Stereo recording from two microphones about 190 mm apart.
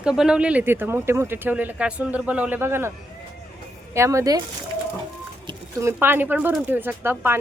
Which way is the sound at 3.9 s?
15° right (ahead or behind).